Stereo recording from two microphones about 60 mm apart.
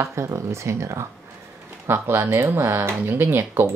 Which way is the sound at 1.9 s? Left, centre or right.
Right.